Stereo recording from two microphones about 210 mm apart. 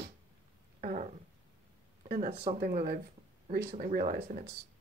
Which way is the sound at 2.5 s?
40° right (ahead or behind).